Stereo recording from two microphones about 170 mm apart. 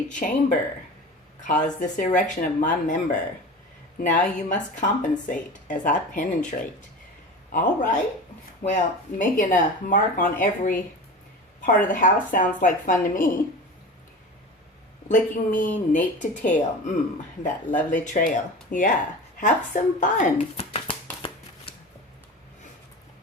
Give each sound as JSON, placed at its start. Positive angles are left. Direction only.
{"t": 0.1, "sound": "speech", "side_deg": 45}
{"t": 4.0, "sound": "speech", "side_deg": 50}
{"t": 7.5, "sound": "speech", "side_deg": 50}
{"t": 15.1, "sound": "speech", "side_deg": 50}
{"t": 20.7, "sound": "shuffling cards", "side_deg": 30}